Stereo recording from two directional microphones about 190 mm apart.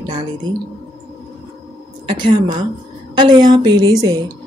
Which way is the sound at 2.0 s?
25° right (ahead or behind).